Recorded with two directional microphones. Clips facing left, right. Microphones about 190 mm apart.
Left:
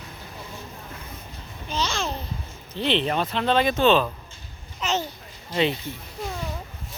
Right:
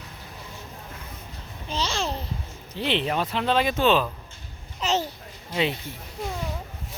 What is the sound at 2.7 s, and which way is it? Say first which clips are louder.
Speech: left 2 dB; 10° right (ahead or behind).